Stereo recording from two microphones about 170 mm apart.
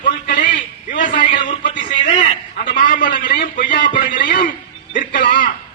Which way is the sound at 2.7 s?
55° left (ahead or behind).